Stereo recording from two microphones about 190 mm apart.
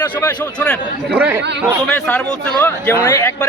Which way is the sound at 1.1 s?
10° right (ahead or behind).